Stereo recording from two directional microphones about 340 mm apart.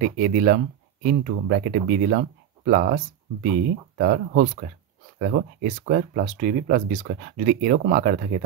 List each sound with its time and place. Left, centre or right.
0.0 s speech: right